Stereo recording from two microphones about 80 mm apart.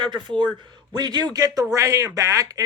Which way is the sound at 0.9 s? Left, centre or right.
Right.